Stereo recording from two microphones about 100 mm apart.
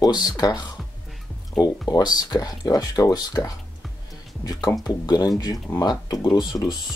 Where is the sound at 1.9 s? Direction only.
40° left (ahead or behind).